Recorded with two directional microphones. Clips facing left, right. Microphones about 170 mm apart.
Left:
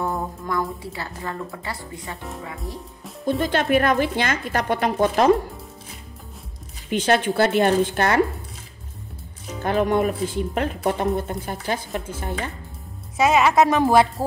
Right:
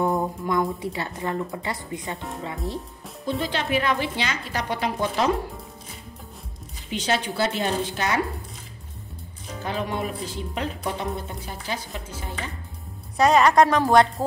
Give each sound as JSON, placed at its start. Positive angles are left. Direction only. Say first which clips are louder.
{"t": 0.0, "sound": "speech", "louder": "right 3 dB", "side_deg": -20}
{"t": 3.3, "sound": "speech", "louder": "left 5 dB", "side_deg": 50}
{"t": 6.9, "sound": "a woman's voice", "louder": "left 6 dB", "side_deg": 55}
{"t": 9.6, "sound": "speech", "louder": "left 8 dB", "side_deg": 55}
{"t": 13.2, "sound": "a woman's voice", "louder": "even", "side_deg": 5}